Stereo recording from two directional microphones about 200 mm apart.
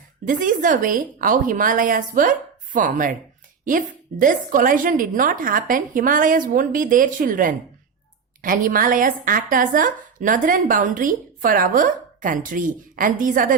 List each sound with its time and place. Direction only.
0.3 s a woman's voice: 40° right (ahead or behind)